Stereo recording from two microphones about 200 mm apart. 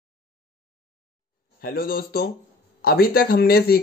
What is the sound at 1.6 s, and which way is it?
Speech, 50° left (ahead or behind).